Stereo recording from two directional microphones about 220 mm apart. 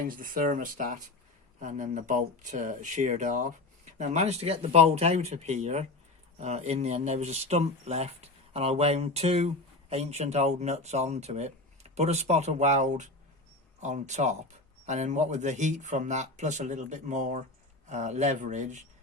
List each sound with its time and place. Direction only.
0.0 s speech: 40° right (ahead or behind)